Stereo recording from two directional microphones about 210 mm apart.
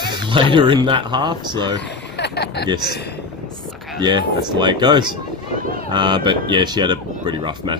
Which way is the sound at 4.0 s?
20° right (ahead or behind).